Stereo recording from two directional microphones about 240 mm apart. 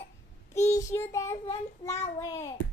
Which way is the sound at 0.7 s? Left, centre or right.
Centre.